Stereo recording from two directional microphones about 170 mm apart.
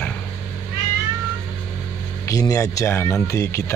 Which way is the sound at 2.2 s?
20° left (ahead or behind).